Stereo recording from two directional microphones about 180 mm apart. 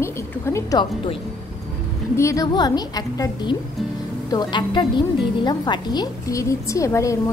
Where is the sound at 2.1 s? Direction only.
15° left (ahead or behind).